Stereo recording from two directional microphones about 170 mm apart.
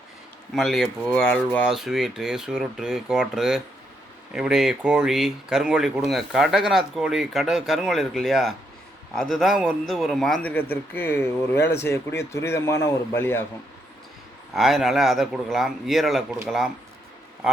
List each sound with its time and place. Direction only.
0.5 s speech: centre (ahead or behind)
14.5 s speech: centre (ahead or behind)